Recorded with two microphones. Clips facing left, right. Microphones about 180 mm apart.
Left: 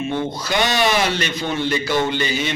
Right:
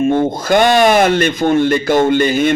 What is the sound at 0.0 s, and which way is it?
Speech, 50° right (ahead or behind).